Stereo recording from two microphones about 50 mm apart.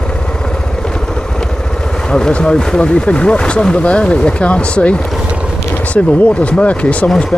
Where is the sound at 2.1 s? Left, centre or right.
Centre.